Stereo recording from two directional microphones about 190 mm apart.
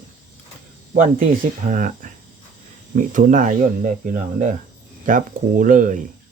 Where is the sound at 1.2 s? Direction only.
45° right (ahead or behind).